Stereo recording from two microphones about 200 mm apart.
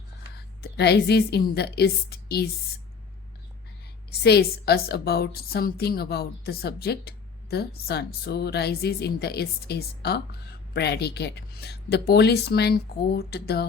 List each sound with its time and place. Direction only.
0.3 s a woman's voice: 55° left (ahead or behind)
4.2 s a woman's voice: 55° left (ahead or behind)